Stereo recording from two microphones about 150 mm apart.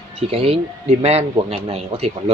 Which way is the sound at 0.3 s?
40° right (ahead or behind).